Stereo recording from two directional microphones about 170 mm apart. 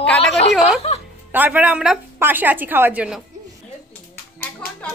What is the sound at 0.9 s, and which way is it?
Music, 40° left (ahead or behind).